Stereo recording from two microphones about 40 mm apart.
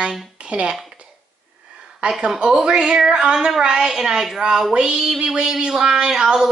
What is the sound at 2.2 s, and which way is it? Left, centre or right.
Speech, centre.